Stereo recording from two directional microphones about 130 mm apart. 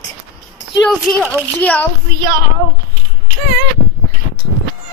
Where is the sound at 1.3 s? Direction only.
10° left (ahead or behind).